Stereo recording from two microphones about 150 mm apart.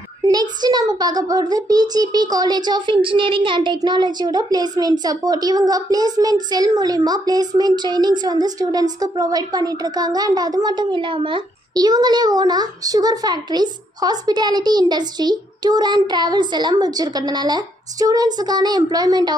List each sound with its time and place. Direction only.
0.2 s a child's voice: 25° right (ahead or behind)